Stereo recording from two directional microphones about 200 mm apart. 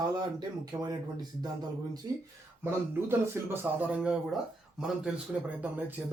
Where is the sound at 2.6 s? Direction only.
10° right (ahead or behind).